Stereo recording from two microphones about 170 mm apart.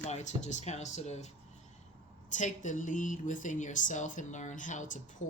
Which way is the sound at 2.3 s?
50° left (ahead or behind).